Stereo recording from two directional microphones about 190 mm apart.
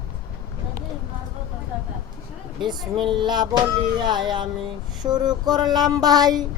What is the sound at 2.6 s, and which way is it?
Speech, 25° right (ahead or behind).